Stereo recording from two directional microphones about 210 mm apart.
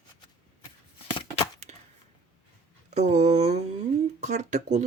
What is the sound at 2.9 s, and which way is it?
Speech, 30° right (ahead or behind).